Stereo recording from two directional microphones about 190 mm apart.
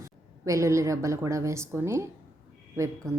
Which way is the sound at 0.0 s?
15° right (ahead or behind).